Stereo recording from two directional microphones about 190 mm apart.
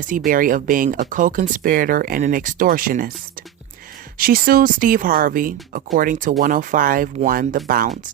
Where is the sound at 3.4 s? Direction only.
50° right (ahead or behind).